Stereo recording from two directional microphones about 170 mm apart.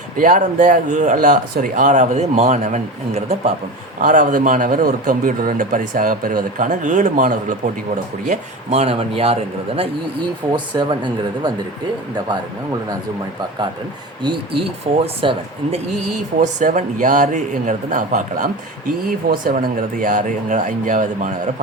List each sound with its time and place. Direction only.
0.2 s speech: 50° right (ahead or behind)
4.0 s a man's voice: 50° right (ahead or behind); by 11.5 s 25° right (ahead or behind)
14.2 s a man's voice: 25° right (ahead or behind)
16.4 s speech: 45° right (ahead or behind)